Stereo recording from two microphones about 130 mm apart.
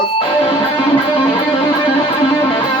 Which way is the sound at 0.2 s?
40° left (ahead or behind).